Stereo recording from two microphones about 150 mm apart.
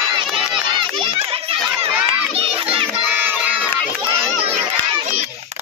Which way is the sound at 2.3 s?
40° right (ahead or behind).